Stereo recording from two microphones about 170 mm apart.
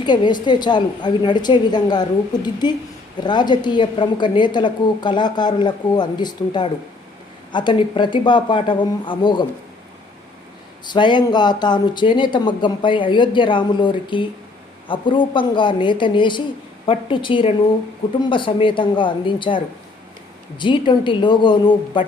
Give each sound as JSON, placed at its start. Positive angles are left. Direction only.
{"t": 0.0, "sound": "a woman's voice", "side_deg": 25}
{"t": 10.8, "sound": "a woman's voice", "side_deg": 25}